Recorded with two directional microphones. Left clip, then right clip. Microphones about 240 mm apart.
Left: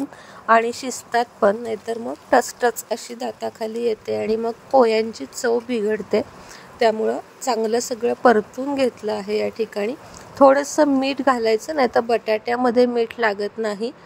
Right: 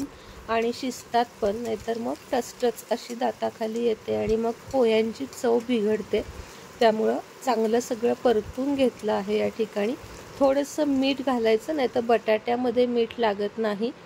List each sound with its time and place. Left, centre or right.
0.5 s speech: left